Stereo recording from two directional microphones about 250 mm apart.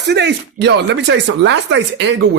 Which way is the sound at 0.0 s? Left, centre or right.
Right.